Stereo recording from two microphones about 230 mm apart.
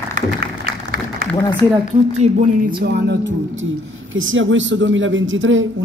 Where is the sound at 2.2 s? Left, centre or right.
Right.